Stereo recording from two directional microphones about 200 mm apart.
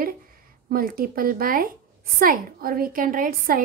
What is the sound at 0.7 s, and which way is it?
A woman's voice, 45° right (ahead or behind).